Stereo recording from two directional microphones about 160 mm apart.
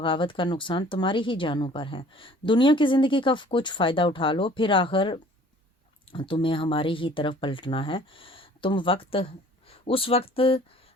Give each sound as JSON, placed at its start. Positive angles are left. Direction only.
{"t": 0.0, "sound": "speech", "side_deg": 30}